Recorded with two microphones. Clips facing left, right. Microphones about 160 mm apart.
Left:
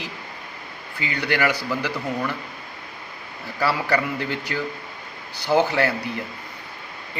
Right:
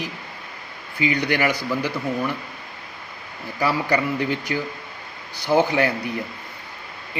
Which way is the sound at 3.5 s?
15° right (ahead or behind).